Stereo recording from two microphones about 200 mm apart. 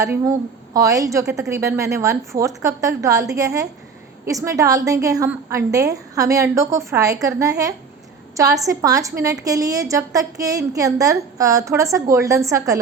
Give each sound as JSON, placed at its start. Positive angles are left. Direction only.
{"t": 0.0, "sound": "a woman's voice", "side_deg": -15}